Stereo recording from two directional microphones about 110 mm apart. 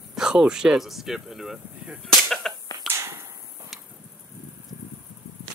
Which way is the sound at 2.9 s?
25° right (ahead or behind).